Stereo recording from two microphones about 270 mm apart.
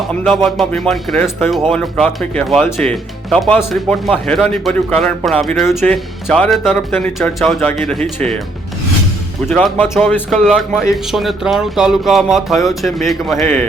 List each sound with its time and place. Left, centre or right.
0.1 s speech: centre
9.5 s speech: centre